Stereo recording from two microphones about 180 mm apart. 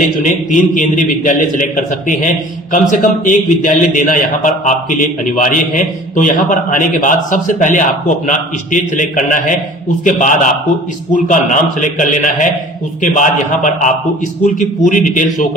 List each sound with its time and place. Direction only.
0.0 s a man's voice: 45° left (ahead or behind)
11.8 s a man's voice: 45° left (ahead or behind)